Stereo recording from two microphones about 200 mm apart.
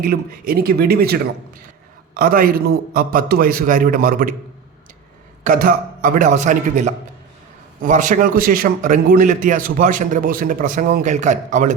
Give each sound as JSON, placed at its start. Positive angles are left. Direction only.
{"t": 0.0, "sound": "a man's voice", "side_deg": -50}
{"t": 5.4, "sound": "a man's voice", "side_deg": -45}